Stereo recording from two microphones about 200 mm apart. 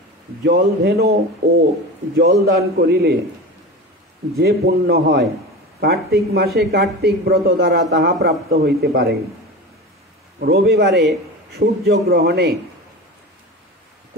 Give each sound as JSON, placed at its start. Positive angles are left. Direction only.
{"t": 0.4, "sound": "speech", "side_deg": -50}
{"t": 2.1, "sound": "speech", "side_deg": -50}
{"t": 4.4, "sound": "speech", "side_deg": -50}
{"t": 10.4, "sound": "speech", "side_deg": -50}